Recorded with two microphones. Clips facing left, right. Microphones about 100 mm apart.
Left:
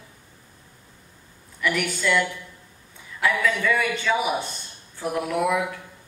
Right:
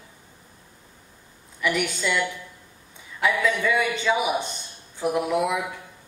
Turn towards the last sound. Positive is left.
turn(degrees=-15)  # may be behind; listen again after turning